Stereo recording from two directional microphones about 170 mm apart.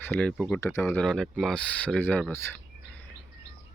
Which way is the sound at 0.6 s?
15° left (ahead or behind).